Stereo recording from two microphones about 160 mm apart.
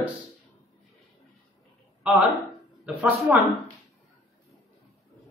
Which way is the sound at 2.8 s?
10° right (ahead or behind).